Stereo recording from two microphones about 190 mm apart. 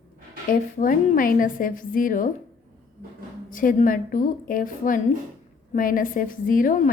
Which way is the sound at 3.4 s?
45° left (ahead or behind).